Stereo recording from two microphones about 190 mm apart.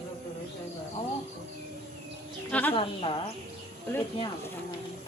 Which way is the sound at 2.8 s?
25° left (ahead or behind).